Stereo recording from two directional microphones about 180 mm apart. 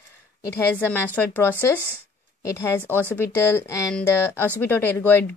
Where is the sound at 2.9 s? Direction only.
15° left (ahead or behind).